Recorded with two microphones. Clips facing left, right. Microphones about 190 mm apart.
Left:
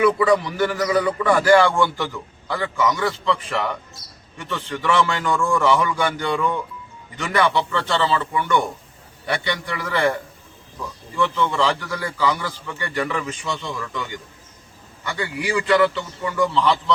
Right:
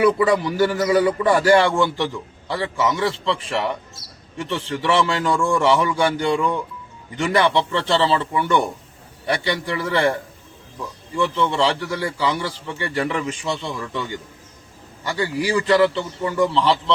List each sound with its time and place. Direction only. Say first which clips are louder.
0.2 s a man's voice: right 1 dB; 35° right (ahead or behind)
11.2 s a man's voice: right 1 dB; 25° right (ahead or behind)